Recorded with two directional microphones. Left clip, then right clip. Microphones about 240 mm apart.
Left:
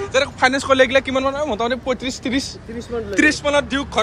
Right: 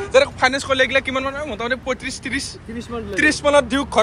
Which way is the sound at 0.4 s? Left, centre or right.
Left.